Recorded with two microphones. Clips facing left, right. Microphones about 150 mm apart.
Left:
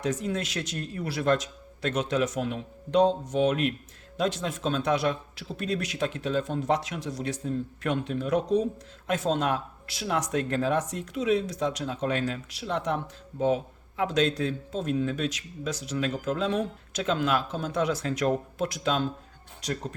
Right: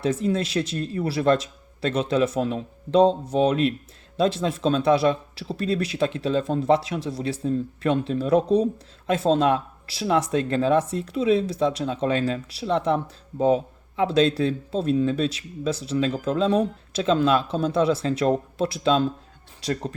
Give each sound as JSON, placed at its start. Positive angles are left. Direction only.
{"t": 0.0, "sound": "speech", "side_deg": -30}